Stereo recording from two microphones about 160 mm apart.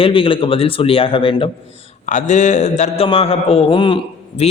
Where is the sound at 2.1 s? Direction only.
50° left (ahead or behind).